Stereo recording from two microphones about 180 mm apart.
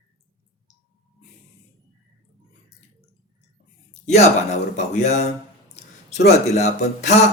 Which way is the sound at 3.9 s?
40° left (ahead or behind).